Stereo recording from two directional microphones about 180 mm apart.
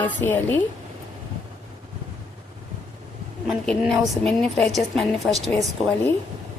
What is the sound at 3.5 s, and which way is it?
A woman's voice, centre (ahead or behind).